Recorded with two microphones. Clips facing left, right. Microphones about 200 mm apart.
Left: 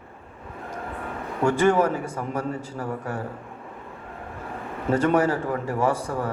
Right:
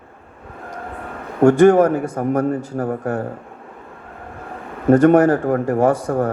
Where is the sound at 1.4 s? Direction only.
65° right (ahead or behind).